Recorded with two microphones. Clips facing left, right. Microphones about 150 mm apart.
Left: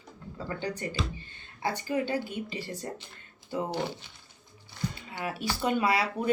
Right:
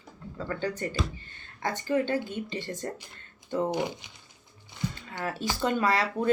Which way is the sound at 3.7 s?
15° right (ahead or behind).